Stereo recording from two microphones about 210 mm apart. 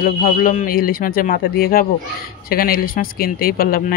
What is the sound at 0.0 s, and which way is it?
Speech, 40° left (ahead or behind).